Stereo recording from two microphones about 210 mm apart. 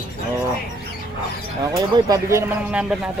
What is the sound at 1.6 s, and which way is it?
Speech, 15° right (ahead or behind).